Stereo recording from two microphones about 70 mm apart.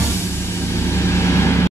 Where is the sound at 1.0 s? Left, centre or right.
Left.